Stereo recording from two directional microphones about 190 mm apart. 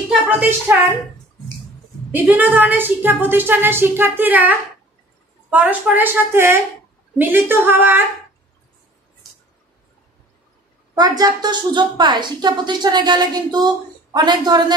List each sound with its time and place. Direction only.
0.1 s speech: 10° right (ahead or behind)
2.1 s a woman's voice: 10° right (ahead or behind)
11.0 s a woman's voice: 20° right (ahead or behind)